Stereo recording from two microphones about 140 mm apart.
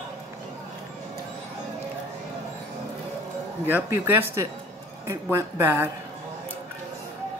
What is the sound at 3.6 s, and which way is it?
A woman's voice, 15° right (ahead or behind).